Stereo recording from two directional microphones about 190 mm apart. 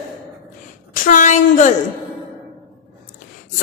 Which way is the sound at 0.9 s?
45° left (ahead or behind).